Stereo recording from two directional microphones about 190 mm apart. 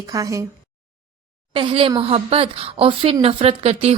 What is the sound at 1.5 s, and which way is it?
Speech, 25° right (ahead or behind).